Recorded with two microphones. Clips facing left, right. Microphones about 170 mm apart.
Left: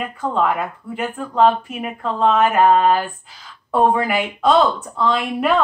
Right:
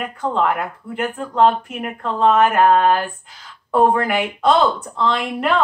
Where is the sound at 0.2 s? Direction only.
5° left (ahead or behind).